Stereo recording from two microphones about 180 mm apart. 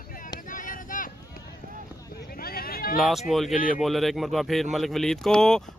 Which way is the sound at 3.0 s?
Centre (ahead or behind).